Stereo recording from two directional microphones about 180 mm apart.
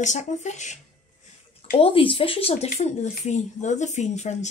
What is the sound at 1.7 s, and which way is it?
Speech, 30° left (ahead or behind).